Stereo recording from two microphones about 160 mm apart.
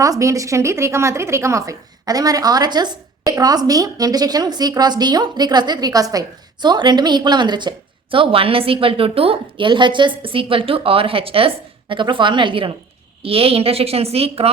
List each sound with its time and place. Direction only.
0.0 s a woman's voice: 20° right (ahead or behind); by 14.5 s 40° right (ahead or behind)